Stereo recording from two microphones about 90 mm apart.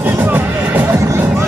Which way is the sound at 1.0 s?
35° right (ahead or behind).